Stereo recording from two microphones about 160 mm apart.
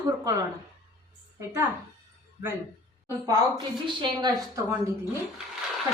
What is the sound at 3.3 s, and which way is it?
A woman's voice, 25° right (ahead or behind).